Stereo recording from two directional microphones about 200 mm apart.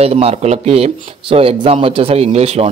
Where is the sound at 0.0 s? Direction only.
30° right (ahead or behind).